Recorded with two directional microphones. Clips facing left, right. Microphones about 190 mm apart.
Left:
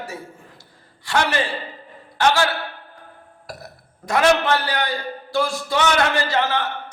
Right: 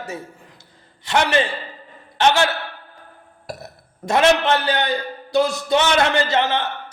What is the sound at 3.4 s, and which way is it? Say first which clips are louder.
A man's voice: right 4 dB; 25° right (ahead or behind).